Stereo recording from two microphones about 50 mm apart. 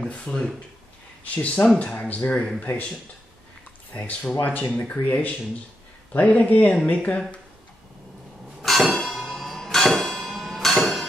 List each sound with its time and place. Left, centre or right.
0.0 s speech: left
8.6 s bell: centre